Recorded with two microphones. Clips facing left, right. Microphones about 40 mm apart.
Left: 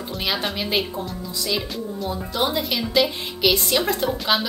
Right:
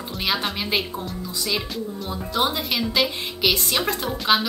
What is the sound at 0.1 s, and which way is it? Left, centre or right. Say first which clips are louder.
A woman's voice: even; centre.